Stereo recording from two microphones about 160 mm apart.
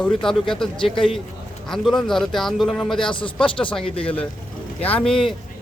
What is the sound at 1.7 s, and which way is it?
A man's voice, 5° left (ahead or behind).